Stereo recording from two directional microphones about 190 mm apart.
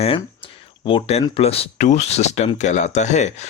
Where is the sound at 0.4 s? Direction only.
25° left (ahead or behind).